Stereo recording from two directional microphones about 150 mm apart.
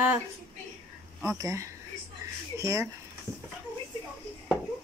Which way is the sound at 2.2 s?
25° right (ahead or behind).